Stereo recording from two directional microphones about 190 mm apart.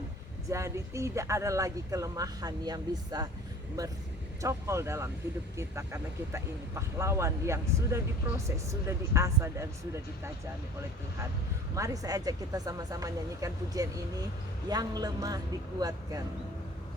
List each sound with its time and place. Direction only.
0.5 s speech: 15° right (ahead or behind)
11.7 s a man's voice: 20° right (ahead or behind)